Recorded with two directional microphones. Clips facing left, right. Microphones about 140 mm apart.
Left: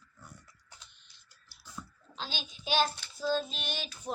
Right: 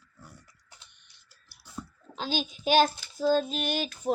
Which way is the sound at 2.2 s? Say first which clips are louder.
Right 10 dB; 50° right (ahead or behind).